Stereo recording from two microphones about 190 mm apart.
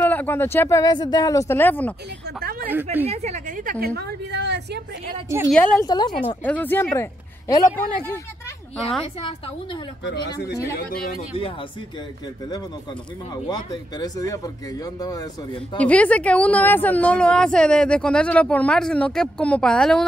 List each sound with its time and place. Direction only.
0.0 s speech: 10° left (ahead or behind)
3.1 s speech: 35° right (ahead or behind)
3.8 s a woman's voice: 60° right (ahead or behind)
5.5 s speech: 10° left (ahead or behind)
5.9 s speech: 25° left (ahead or behind)
6.2 s speech: 10° left (ahead or behind)
10.3 s speech: 15° left (ahead or behind)
13.5 s speech: 20° left (ahead or behind)
15.8 s a woman's voice: 5° left (ahead or behind)